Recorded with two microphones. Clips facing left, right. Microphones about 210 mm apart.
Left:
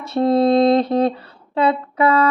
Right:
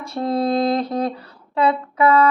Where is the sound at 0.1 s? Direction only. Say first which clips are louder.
Left 6 dB; 25° left (ahead or behind).